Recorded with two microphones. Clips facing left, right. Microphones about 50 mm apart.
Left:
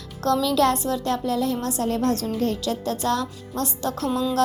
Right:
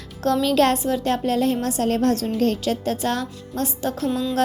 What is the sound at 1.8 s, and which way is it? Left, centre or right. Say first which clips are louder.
Speech: right 3 dB; right.